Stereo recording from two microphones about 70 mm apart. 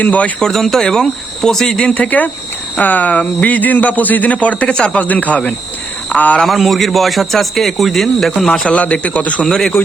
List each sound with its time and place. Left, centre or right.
0.0 s speech: left
0.3 s speech: centre
6.4 s a man's voice: centre
8.7 s speech: centre